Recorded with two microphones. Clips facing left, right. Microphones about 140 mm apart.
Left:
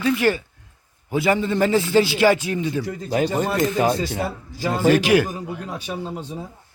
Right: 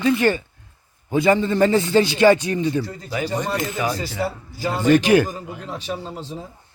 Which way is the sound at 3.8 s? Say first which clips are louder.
Left 4 dB; 25° left (ahead or behind).